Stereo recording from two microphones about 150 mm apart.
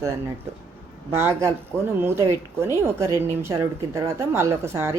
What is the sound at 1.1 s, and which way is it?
A woman's voice, 15° right (ahead or behind).